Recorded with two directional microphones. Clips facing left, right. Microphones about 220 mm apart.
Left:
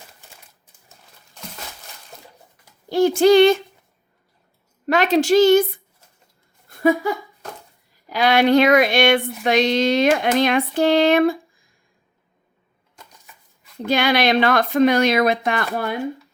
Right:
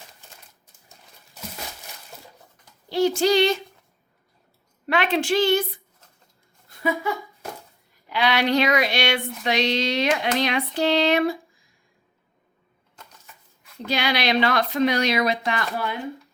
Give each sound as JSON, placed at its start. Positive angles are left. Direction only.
{"t": 0.9, "sound": "crumpling", "side_deg": -5}
{"t": 2.9, "sound": "female singing", "side_deg": 55}
{"t": 4.9, "sound": "female singing", "side_deg": 40}
{"t": 6.7, "sound": "a sound", "side_deg": 50}
{"t": 8.1, "sound": "female singing", "side_deg": 50}
{"t": 10.8, "sound": "a sound", "side_deg": 50}
{"t": 13.8, "sound": "female singing", "side_deg": 50}